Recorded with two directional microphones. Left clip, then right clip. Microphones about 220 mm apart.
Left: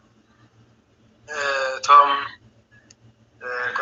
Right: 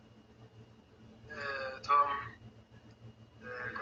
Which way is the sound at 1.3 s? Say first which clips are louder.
Left 16 dB; 40° left (ahead or behind).